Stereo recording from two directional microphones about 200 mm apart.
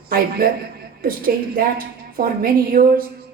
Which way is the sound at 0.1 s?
50° right (ahead or behind).